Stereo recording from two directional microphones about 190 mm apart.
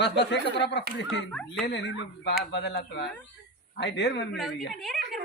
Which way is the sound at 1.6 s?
65° left (ahead or behind).